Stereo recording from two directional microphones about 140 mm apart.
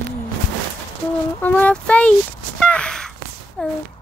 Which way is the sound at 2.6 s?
5° left (ahead or behind).